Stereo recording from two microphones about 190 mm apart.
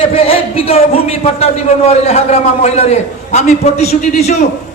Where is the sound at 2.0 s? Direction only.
35° left (ahead or behind).